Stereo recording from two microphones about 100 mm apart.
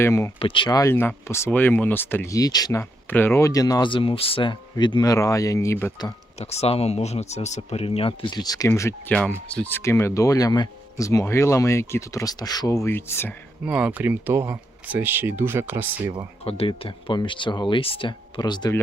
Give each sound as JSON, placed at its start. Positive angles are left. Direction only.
{"t": 0.0, "sound": "speech", "side_deg": 25}
{"t": 0.3, "sound": "speech", "side_deg": 60}
{"t": 0.8, "sound": "speech", "side_deg": 25}
{"t": 2.3, "sound": "speech", "side_deg": 40}
{"t": 3.1, "sound": "speech", "side_deg": 20}
{"t": 3.8, "sound": "speech", "side_deg": 60}
{"t": 5.0, "sound": "speech", "side_deg": 35}
{"t": 6.0, "sound": "speech", "side_deg": 45}
{"t": 6.4, "sound": "speech", "side_deg": 90}
{"t": 8.4, "sound": "speech", "side_deg": 40}
{"t": 12.9, "sound": "speech", "side_deg": 25}
{"t": 13.7, "sound": "speech", "side_deg": -15}
{"t": 16.4, "sound": "speech", "side_deg": 75}
{"t": 18.3, "sound": "speech", "side_deg": 45}